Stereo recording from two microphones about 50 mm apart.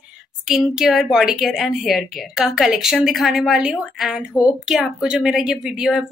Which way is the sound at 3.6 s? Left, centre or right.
Centre.